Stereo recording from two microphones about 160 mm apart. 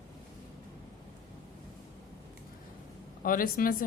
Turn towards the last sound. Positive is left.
turn(degrees=60)  # may be behind; listen again after turning